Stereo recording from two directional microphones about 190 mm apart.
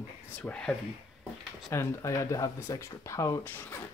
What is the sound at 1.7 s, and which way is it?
Speech, 15° left (ahead or behind).